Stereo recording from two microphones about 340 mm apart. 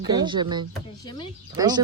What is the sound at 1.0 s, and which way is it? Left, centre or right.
Speech, centre.